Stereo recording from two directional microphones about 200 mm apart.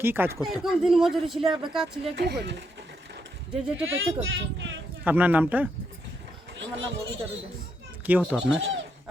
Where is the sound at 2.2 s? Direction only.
55° right (ahead or behind).